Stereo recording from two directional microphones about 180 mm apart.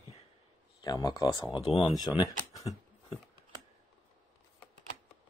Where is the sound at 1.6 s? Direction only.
35° left (ahead or behind).